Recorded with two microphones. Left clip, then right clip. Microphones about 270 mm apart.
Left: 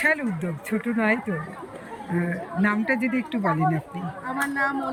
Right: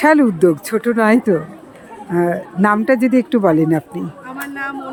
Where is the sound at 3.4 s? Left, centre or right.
Right.